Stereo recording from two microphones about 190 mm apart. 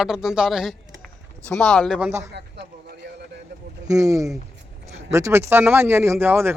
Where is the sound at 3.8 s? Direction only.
15° right (ahead or behind).